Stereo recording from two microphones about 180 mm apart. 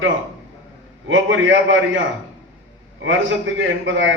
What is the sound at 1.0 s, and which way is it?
Speech, 90° right.